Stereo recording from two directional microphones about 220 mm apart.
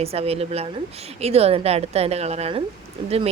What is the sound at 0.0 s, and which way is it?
A woman's voice, 25° right (ahead or behind).